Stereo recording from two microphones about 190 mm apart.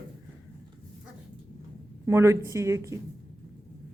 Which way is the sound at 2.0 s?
15° right (ahead or behind).